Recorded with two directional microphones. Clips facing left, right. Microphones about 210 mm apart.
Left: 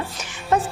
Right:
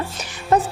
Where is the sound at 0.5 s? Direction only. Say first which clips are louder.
Right 3 dB; 35° right (ahead or behind).